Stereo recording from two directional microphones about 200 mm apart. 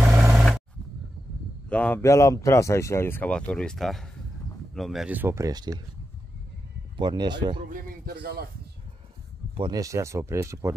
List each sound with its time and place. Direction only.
0.1 s vehicle: 10° right (ahead or behind)
1.7 s speech: 5° left (ahead or behind); by 5.8 s 20° right (ahead or behind)
7.0 s speech: 20° right (ahead or behind)
7.7 s speech: 50° right (ahead or behind)
9.6 s speech: 20° right (ahead or behind)